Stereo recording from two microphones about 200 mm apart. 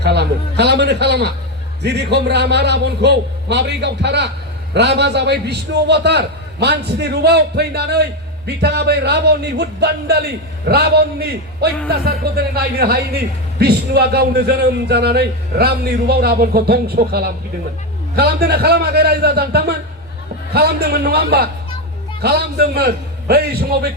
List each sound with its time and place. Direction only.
0.0 s a man's voice: 55° right (ahead or behind)